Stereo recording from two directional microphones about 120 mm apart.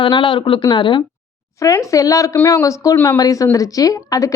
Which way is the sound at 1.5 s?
25° left (ahead or behind).